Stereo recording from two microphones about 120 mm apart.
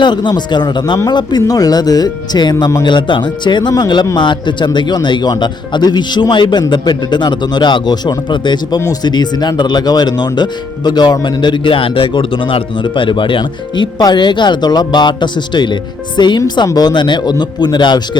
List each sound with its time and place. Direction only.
0.0 s speech: 40° left (ahead or behind)